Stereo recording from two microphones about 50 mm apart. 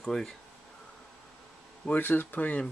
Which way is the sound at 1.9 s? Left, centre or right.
Left.